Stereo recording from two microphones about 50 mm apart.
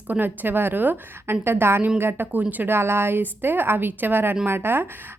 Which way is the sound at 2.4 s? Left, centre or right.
Right.